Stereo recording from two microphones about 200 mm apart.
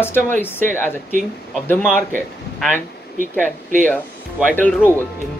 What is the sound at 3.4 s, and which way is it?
Speech, 40° right (ahead or behind).